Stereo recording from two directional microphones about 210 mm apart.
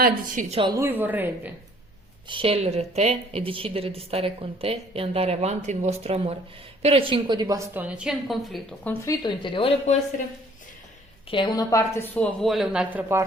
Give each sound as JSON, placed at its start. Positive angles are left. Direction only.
{"t": 0.0, "sound": "a woman's voice", "side_deg": -40}
{"t": 0.5, "sound": "a woman's voice", "side_deg": -20}
{"t": 2.2, "sound": "a woman's voice", "side_deg": -25}
{"t": 8.9, "sound": "speech", "side_deg": 15}
{"t": 11.3, "sound": "a woman's voice", "side_deg": 20}